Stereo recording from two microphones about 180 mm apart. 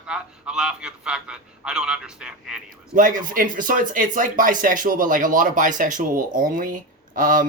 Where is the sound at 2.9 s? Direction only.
45° right (ahead or behind).